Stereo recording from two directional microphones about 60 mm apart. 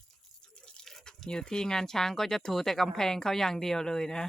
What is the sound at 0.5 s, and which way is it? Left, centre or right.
Speech, centre.